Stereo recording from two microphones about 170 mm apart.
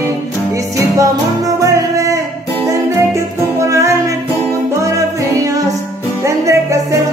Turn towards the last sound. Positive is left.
turn(degrees=-20)  # may be behind; listen again after turning